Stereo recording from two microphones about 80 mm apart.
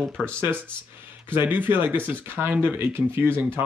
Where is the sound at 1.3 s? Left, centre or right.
Right.